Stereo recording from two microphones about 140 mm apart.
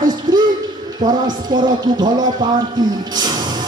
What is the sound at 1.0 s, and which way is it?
Music, 30° right (ahead or behind).